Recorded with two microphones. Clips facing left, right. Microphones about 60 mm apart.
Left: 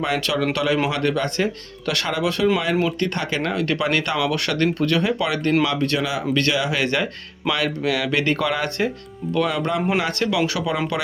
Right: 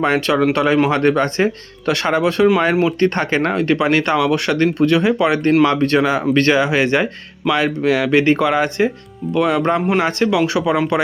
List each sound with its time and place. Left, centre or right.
0.0 s speech: right